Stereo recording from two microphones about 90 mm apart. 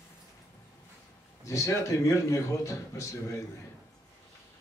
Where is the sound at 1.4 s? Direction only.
35° left (ahead or behind).